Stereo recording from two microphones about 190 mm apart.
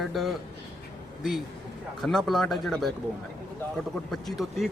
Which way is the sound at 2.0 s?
Centre (ahead or behind).